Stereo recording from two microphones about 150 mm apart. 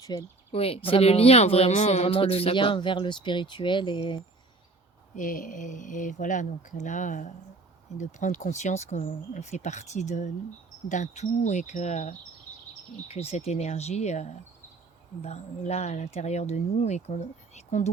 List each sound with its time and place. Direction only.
0.0 s speech: 25° left (ahead or behind)
0.5 s speech: 40° left (ahead or behind)
5.1 s speech: 65° left (ahead or behind)